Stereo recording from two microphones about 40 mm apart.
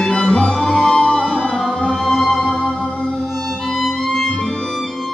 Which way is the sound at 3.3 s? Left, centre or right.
Centre.